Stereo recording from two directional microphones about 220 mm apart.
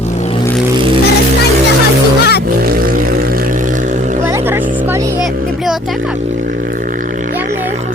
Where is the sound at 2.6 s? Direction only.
40° right (ahead or behind).